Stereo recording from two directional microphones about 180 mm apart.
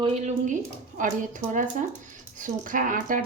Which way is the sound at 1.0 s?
45° right (ahead or behind).